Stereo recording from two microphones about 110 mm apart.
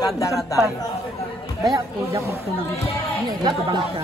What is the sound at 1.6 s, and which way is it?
Speech, 30° right (ahead or behind).